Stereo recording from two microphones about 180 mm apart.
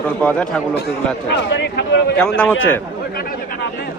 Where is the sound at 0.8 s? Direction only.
65° left (ahead or behind).